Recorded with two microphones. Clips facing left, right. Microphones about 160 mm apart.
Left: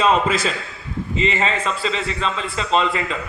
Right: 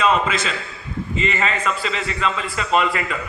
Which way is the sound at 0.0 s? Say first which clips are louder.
Left 2 dB; 35° left (ahead or behind).